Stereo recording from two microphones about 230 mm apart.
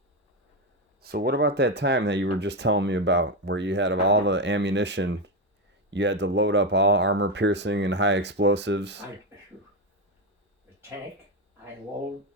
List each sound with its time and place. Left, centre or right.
1.0 s speech: right